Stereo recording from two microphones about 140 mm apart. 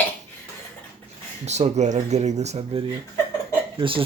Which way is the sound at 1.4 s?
55° right (ahead or behind).